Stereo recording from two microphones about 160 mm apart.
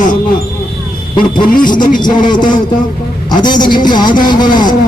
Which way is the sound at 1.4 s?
60° left (ahead or behind).